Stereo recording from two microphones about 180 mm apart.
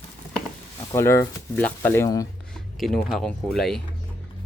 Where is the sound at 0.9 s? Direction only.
15° left (ahead or behind).